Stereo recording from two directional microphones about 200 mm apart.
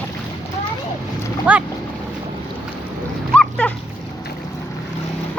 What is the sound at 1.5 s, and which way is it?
Speech, 5° right (ahead or behind).